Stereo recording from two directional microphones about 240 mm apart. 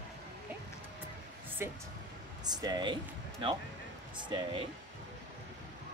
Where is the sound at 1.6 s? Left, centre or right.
Centre.